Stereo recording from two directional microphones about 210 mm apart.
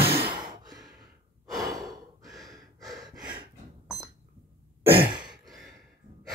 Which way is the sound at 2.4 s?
15° right (ahead or behind).